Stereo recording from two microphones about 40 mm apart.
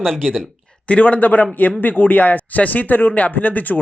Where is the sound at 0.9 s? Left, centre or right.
Left.